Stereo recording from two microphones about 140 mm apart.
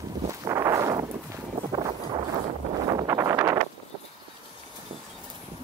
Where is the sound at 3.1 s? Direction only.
20° right (ahead or behind).